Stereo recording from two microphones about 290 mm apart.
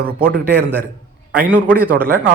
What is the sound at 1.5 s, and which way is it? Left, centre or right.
Speech, centre.